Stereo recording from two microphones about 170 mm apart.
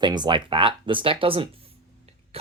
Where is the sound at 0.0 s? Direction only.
25° right (ahead or behind).